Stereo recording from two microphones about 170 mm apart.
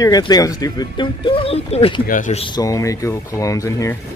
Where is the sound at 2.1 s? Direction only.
50° left (ahead or behind).